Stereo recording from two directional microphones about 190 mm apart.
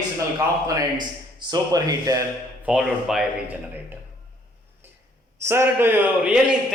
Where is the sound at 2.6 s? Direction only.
5° right (ahead or behind).